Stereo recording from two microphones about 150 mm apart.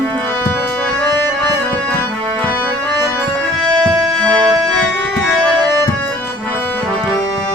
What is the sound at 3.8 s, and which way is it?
Music, 5° left (ahead or behind).